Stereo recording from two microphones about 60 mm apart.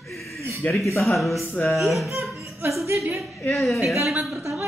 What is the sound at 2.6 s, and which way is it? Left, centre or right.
Laughter, right.